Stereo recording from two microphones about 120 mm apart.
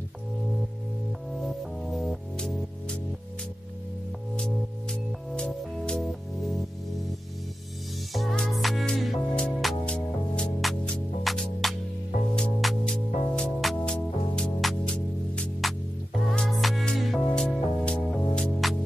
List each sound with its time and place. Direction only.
1.4 s music: centre (ahead or behind)
4.4 s music: 5° left (ahead or behind)
8.1 s music: centre (ahead or behind)